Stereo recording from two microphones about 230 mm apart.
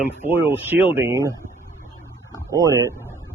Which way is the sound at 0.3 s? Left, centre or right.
Centre.